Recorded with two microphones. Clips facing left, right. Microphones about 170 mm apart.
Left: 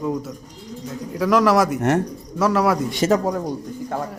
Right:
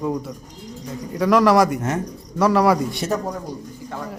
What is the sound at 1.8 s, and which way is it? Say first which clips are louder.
Speech: left 5 dB; 70° left (ahead or behind).